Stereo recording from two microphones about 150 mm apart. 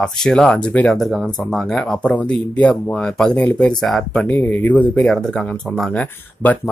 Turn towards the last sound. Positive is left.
turn(degrees=10)  # may be behind; listen again after turning